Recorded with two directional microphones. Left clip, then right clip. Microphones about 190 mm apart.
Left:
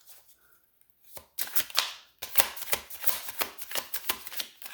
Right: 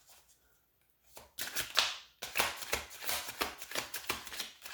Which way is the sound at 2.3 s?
30° left (ahead or behind).